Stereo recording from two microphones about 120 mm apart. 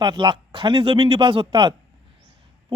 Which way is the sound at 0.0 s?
40° right (ahead or behind).